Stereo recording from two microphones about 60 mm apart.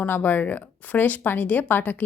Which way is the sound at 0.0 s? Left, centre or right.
Left.